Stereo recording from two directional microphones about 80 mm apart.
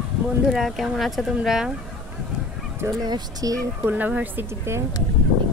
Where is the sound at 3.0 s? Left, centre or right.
Right.